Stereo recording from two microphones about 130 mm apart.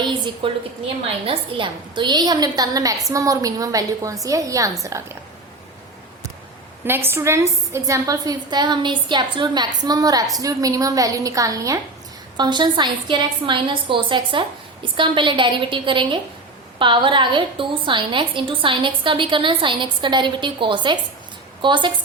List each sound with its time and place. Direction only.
0.4 s a woman's voice: 40° right (ahead or behind); by 5.1 s 25° right (ahead or behind)
6.8 s a woman's voice: 15° right (ahead or behind); by 21.9 s 40° right (ahead or behind)